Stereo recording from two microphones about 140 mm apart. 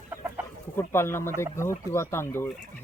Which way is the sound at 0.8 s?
20° left (ahead or behind).